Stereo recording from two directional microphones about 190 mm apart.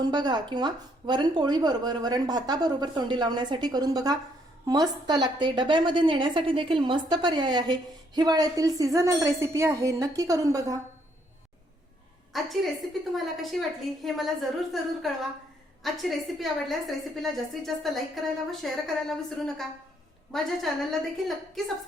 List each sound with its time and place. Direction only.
0.0 s a woman's voice: 20° right (ahead or behind)
12.3 s a woman's voice: centre (ahead or behind)